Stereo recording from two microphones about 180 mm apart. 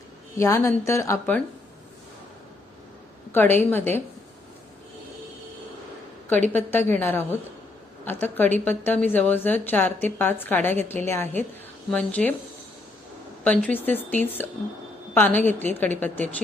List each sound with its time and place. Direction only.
0.3 s a woman's voice: 15° left (ahead or behind)
3.3 s a woman's voice: 10° left (ahead or behind)
6.5 s a woman's voice: 10° left (ahead or behind)
13.4 s a woman's voice: 10° left (ahead or behind)